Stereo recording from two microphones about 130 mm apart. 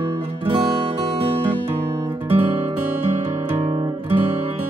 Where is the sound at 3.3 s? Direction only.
50° right (ahead or behind).